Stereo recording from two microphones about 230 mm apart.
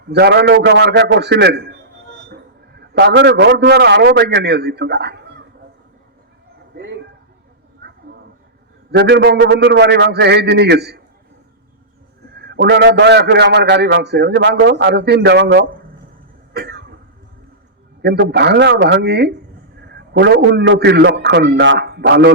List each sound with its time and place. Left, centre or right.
0.1 s a man's voice: right
6.7 s a sound: right
8.9 s a man's voice: right
12.4 s a man's voice: right
16.5 s cough: right
18.0 s a man's voice: right